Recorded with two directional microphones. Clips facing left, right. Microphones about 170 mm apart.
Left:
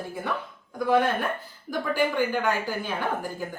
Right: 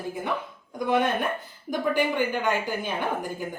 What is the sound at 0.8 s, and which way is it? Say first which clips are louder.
A woman's voice: left 1 dB; 20° right (ahead or behind).